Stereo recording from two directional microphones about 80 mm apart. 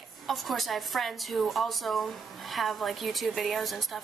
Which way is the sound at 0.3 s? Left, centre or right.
Centre.